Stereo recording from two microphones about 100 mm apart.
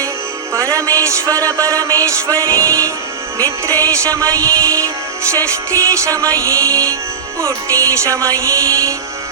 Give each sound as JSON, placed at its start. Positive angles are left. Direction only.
{"t": 0.5, "sound": "music", "side_deg": -35}